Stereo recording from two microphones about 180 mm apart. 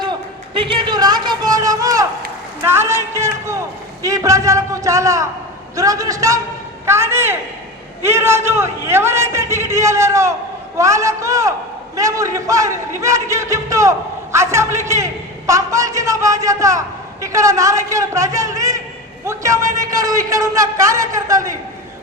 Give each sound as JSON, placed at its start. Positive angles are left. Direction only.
{"t": 0.5, "sound": "a man's voice", "side_deg": -30}